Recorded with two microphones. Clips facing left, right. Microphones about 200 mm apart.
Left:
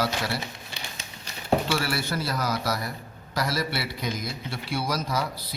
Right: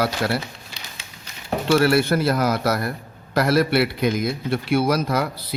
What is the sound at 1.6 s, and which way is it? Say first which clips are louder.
A man's voice: right 11 dB; 55° right (ahead or behind).